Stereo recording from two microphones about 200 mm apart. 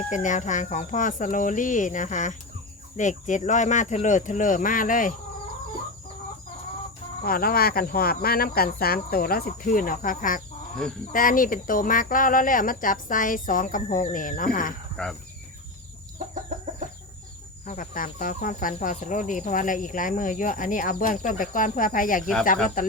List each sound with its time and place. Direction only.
0.1 s speech: 40° left (ahead or behind)
7.3 s speech: 45° left (ahead or behind)
15.0 s speech: 5° left (ahead or behind)
16.5 s chicken: 35° right (ahead or behind)
17.7 s speech: 40° left (ahead or behind)